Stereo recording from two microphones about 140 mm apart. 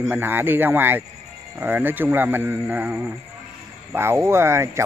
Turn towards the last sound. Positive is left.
turn(degrees=-20)  # may be behind; listen again after turning